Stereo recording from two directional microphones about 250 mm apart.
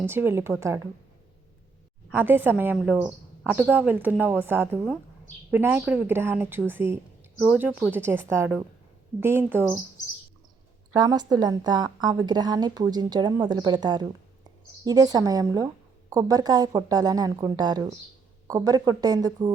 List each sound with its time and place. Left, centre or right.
0.0 s a woman's voice: centre
2.1 s a woman's voice: centre
10.9 s a woman's voice: centre